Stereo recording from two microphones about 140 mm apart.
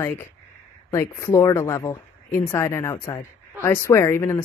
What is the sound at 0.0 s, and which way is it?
Speech, 15° left (ahead or behind).